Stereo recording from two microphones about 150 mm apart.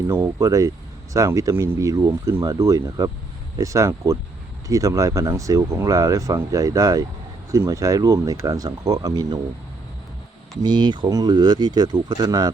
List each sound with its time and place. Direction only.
0.1 s speech: 20° right (ahead or behind)
10.6 s speech: 30° right (ahead or behind)